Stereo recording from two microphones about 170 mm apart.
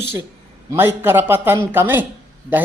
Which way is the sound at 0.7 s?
15° right (ahead or behind).